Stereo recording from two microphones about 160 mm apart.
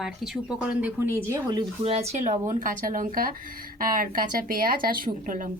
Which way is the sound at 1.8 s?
40° right (ahead or behind).